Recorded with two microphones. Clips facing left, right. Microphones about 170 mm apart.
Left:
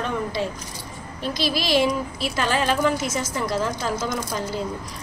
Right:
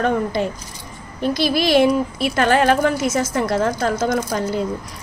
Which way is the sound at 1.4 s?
55° right (ahead or behind).